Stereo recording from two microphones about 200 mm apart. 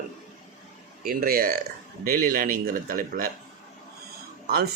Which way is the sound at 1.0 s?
45° right (ahead or behind).